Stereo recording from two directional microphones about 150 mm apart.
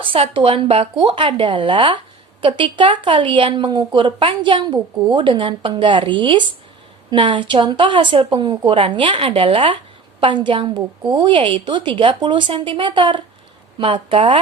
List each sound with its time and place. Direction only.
0.0 s speech: 35° right (ahead or behind)